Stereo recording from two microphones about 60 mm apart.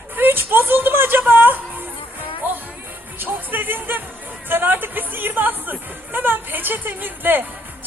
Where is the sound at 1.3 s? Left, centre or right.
Right.